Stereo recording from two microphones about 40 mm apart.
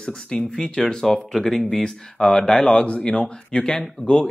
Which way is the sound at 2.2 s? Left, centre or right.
Left.